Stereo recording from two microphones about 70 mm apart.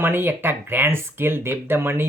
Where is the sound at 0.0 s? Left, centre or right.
Right.